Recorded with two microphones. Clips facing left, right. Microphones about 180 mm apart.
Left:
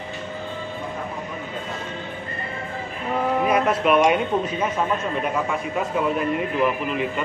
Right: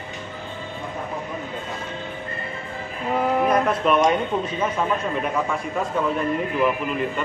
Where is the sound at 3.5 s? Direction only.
5° left (ahead or behind).